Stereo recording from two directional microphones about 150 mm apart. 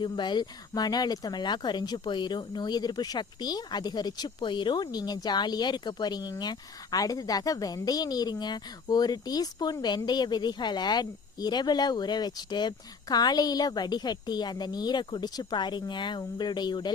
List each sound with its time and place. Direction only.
0.0 s speech: 30° left (ahead or behind)